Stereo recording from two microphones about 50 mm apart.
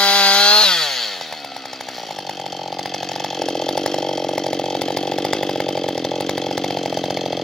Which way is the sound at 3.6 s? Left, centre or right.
Centre.